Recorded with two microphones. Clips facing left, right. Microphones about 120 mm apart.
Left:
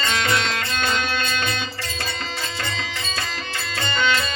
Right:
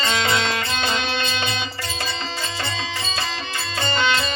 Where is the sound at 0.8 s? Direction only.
50° left (ahead or behind).